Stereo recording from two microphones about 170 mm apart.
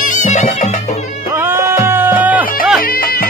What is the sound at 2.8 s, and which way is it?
Music, 60° left (ahead or behind).